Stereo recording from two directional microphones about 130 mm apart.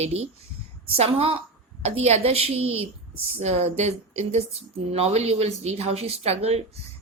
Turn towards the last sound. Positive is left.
turn(degrees=-55)  # may be behind; listen again after turning